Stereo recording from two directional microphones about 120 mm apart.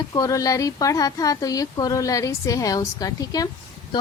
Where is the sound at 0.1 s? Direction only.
30° left (ahead or behind).